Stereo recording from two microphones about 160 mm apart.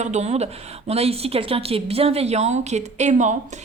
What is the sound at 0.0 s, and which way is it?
A woman's voice, 45° right (ahead or behind).